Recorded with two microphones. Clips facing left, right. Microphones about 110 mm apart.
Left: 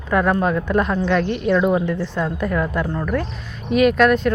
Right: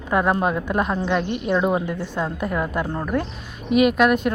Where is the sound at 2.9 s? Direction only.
25° right (ahead or behind).